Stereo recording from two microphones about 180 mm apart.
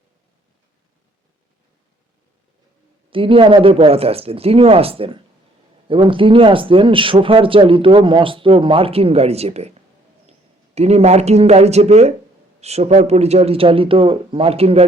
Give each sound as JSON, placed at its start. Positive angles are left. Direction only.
{"t": 3.1, "sound": "a man's voice", "side_deg": -30}